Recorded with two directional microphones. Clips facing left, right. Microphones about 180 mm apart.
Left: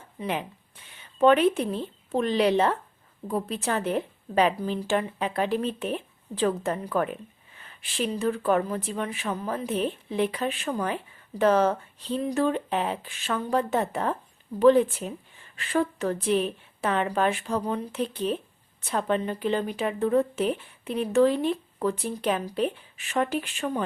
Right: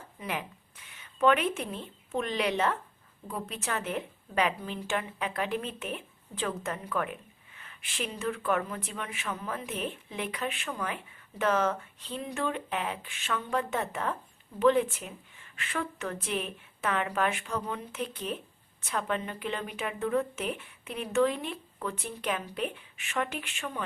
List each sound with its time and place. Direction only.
0.2 s speech: 30° left (ahead or behind)